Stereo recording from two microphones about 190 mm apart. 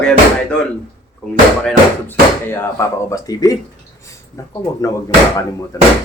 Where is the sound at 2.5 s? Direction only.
15° left (ahead or behind).